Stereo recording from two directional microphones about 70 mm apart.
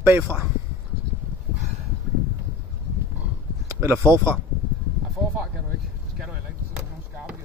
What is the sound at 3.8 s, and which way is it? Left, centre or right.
Speech, right.